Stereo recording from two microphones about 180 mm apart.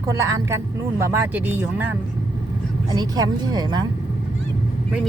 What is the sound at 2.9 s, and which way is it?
Speech, 25° right (ahead or behind).